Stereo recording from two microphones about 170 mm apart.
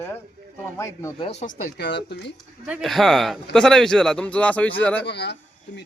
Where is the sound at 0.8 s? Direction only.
15° left (ahead or behind).